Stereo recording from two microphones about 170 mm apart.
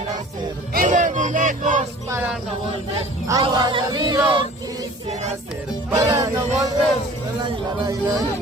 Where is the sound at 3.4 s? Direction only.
25° right (ahead or behind).